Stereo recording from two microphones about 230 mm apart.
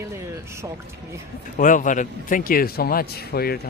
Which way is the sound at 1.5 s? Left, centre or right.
Left.